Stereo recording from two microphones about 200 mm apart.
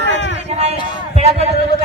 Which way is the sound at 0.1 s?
65° left (ahead or behind).